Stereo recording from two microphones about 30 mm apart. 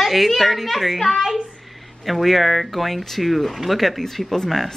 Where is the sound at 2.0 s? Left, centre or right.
Centre.